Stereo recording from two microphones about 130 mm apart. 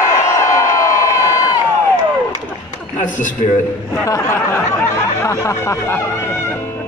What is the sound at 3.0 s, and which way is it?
Speech, 75° left (ahead or behind).